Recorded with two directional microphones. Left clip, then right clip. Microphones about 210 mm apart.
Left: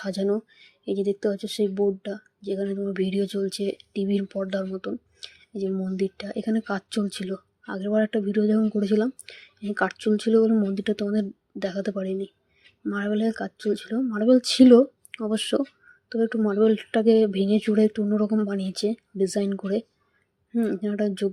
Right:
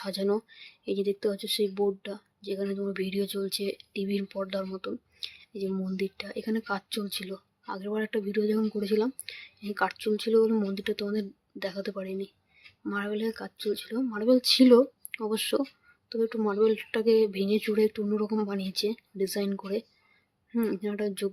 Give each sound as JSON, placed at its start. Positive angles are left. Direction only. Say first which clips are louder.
{"t": 0.0, "sound": "speech", "louder": "left 3 dB", "side_deg": 10}
{"t": 20.9, "sound": "speech", "louder": "left 5 dB", "side_deg": 10}